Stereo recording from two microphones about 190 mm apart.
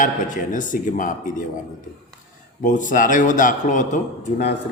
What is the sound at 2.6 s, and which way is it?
A man's voice, 45° left (ahead or behind).